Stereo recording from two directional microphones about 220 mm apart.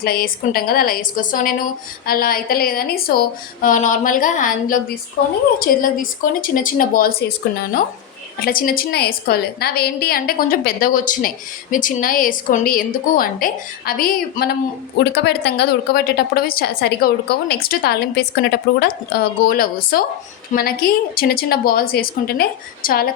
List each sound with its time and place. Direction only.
0.0 s a woman's voice: 45° left (ahead or behind)